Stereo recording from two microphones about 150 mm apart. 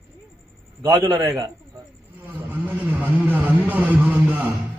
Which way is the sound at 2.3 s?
10° right (ahead or behind).